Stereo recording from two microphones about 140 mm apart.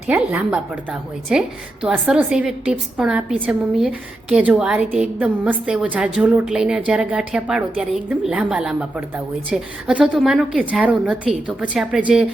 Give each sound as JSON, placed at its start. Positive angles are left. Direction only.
{"t": 0.1, "sound": "a woman's voice", "side_deg": -10}